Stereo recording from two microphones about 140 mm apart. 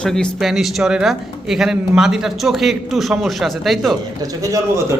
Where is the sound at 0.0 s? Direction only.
5° left (ahead or behind).